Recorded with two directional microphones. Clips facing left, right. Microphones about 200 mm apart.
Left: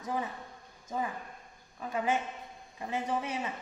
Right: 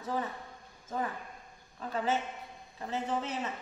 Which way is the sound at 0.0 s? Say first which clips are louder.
Even; 15° left (ahead or behind).